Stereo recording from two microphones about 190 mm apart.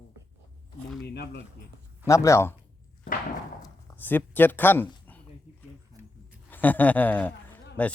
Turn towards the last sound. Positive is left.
turn(degrees=10)  # may be behind; listen again after turning